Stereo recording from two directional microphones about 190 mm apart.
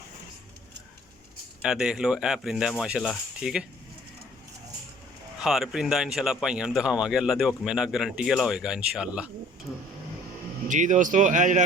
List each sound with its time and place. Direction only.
1.6 s speech: 5° right (ahead or behind)
5.4 s speech: centre (ahead or behind)
10.7 s speech: 40° right (ahead or behind)